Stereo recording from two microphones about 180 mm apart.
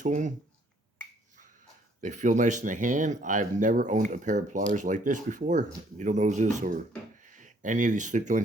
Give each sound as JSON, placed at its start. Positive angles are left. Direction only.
{"t": 0.0, "sound": "speech", "side_deg": -45}
{"t": 2.0, "sound": "speech", "side_deg": -45}